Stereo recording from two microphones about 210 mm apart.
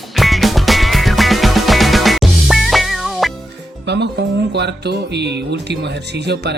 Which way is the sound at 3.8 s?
55° right (ahead or behind).